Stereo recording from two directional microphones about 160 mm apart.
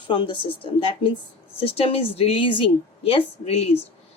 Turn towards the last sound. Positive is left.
turn(degrees=40)  # may be behind; listen again after turning